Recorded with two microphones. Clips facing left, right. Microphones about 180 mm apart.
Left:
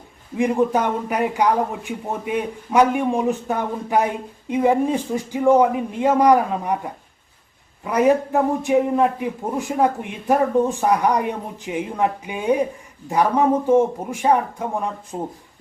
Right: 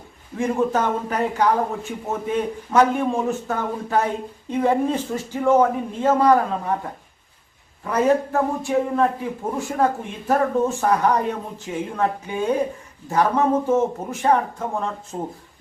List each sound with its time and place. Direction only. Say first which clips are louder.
0.3 s a man's voice: left 2 dB; 15° left (ahead or behind)
7.9 s a man's voice: left 2 dB; 15° left (ahead or behind)